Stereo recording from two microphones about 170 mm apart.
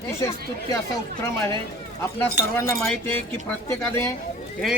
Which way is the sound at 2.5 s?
15° left (ahead or behind).